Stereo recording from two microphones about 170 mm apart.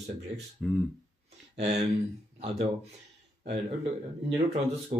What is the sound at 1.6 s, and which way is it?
Speech, 45° right (ahead or behind).